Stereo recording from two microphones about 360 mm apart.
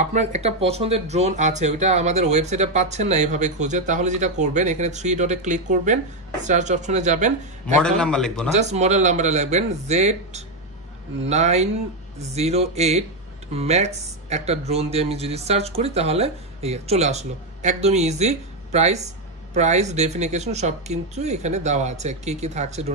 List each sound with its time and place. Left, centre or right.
0.0 s speech: centre
7.8 s a man's voice: centre
8.5 s speech: centre